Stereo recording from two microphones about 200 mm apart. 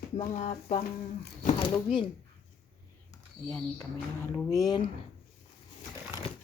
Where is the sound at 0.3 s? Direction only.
35° left (ahead or behind).